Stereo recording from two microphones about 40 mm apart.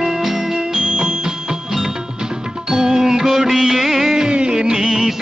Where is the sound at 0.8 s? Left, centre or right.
Right.